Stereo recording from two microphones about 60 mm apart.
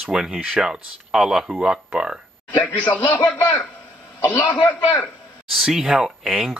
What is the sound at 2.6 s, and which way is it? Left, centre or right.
A man's voice, left.